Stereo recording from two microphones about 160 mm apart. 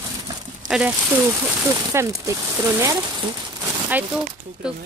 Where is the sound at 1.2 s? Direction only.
20° right (ahead or behind).